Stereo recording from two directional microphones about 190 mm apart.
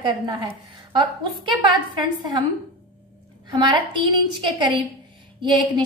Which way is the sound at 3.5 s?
25° right (ahead or behind).